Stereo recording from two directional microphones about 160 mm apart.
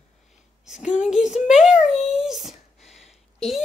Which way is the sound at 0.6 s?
5° right (ahead or behind).